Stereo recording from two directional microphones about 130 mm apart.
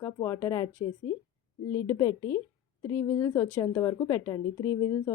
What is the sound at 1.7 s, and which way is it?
A woman's voice, 25° left (ahead or behind).